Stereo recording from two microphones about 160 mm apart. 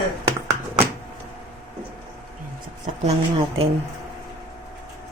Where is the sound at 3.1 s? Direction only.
35° right (ahead or behind).